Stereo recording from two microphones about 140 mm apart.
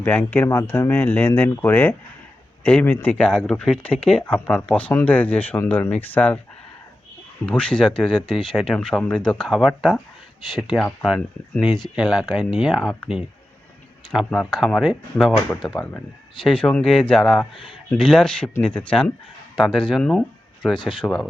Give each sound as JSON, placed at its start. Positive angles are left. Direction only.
{"t": 0.0, "sound": "speech", "side_deg": 15}
{"t": 7.4, "sound": "speech", "side_deg": 10}
{"t": 11.9, "sound": "speech", "side_deg": -5}
{"t": 14.3, "sound": "speech", "side_deg": 5}
{"t": 15.8, "sound": "speech", "side_deg": 15}
{"t": 19.5, "sound": "speech", "side_deg": 0}
{"t": 20.7, "sound": "speech", "side_deg": 35}